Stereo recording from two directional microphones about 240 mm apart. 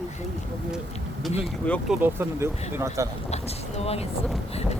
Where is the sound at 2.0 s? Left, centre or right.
Centre.